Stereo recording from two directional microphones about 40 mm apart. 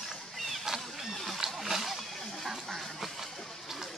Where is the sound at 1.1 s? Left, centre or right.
Centre.